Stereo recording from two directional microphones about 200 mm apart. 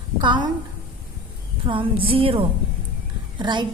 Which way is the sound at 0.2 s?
20° right (ahead or behind).